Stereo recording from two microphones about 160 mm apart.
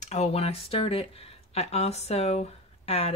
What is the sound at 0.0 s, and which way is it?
Speech, 45° left (ahead or behind).